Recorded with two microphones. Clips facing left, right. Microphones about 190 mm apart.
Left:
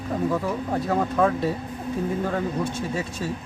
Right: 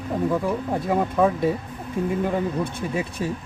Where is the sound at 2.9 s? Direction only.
15° right (ahead or behind).